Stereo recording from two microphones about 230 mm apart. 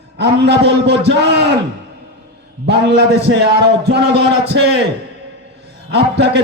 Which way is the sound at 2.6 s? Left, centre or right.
Right.